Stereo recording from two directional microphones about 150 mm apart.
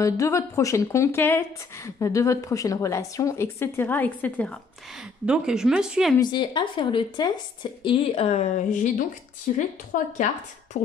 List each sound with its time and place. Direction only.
0.0 s speech: 20° left (ahead or behind)
5.2 s speech: 5° right (ahead or behind)
6.1 s a woman's voice: 30° left (ahead or behind); by 10.8 s 55° left (ahead or behind)